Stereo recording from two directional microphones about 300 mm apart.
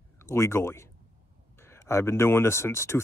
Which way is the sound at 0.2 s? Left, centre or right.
Centre.